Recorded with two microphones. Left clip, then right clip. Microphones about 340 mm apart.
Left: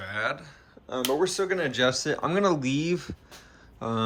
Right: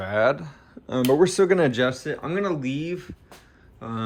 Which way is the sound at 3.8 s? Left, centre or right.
Centre.